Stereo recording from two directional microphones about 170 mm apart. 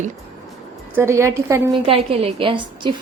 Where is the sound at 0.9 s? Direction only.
15° right (ahead or behind).